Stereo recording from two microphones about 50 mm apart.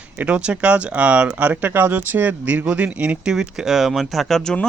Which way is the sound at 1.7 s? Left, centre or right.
Right.